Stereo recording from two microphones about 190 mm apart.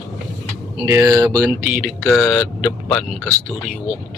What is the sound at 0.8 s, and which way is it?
Speech, 15° right (ahead or behind).